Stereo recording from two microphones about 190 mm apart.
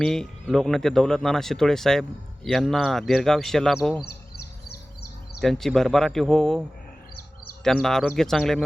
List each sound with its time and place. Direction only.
0.0 s speech: centre (ahead or behind)
4.0 s a sound: 55° left (ahead or behind)
5.4 s speech: centre (ahead or behind)